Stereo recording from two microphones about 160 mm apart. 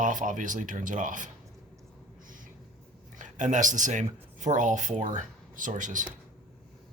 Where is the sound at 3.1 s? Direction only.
50° right (ahead or behind).